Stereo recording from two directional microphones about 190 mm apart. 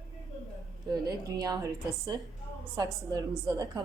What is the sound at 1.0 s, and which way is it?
A woman's voice, 20° right (ahead or behind).